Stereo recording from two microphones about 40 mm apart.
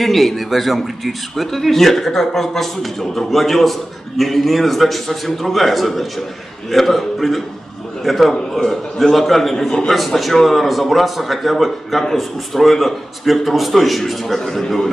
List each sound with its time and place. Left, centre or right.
0.0 s a man's voice: centre
9.8 s a man's voice: centre